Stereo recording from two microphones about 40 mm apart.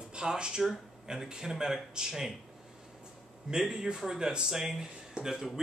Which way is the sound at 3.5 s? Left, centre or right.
Centre.